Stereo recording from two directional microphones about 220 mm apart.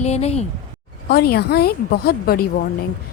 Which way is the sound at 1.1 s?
45° left (ahead or behind).